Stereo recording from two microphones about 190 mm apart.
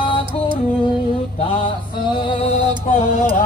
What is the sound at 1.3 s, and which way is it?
Mantra, 30° left (ahead or behind).